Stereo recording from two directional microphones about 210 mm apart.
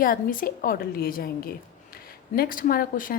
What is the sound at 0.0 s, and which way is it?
A woman's voice, 40° left (ahead or behind).